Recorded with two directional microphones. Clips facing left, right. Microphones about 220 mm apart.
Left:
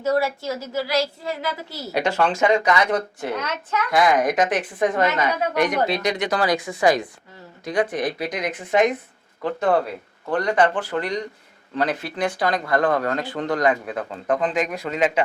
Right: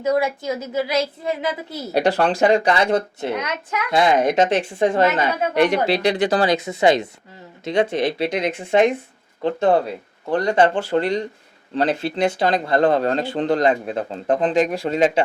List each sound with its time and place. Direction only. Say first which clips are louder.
0.0 s speech: right 2 dB; 15° right (ahead or behind)
1.9 s speech: right 3 dB; 35° right (ahead or behind)
3.3 s speech: right 1 dB; 10° right (ahead or behind)
3.9 s speech: right 2 dB; 25° right (ahead or behind)